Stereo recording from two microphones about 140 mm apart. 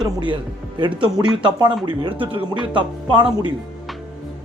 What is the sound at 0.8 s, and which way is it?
Speech, 35° right (ahead or behind).